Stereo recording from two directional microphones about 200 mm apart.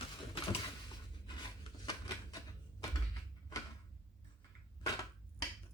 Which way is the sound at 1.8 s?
20° left (ahead or behind).